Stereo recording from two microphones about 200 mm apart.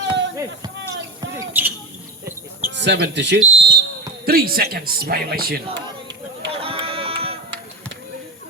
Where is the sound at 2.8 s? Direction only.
60° right (ahead or behind).